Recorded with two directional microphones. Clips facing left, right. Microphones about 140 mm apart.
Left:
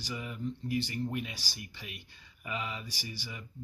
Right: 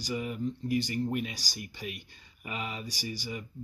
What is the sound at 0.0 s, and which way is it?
Speech, 50° right (ahead or behind).